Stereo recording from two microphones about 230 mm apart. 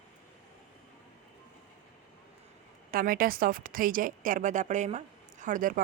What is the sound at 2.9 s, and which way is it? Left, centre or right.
Speech, right.